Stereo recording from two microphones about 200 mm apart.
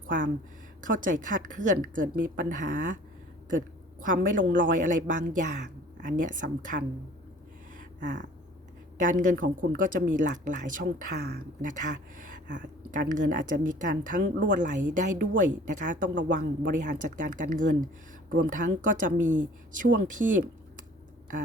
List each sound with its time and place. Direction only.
0.8 s a woman's voice: 40° right (ahead or behind)
4.0 s a woman's voice: 40° right (ahead or behind)
7.8 s a sound: 40° right (ahead or behind)
9.0 s a woman's voice: 40° right (ahead or behind)